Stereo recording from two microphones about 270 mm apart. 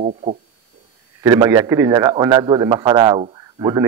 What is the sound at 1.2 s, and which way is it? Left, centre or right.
Speech, centre.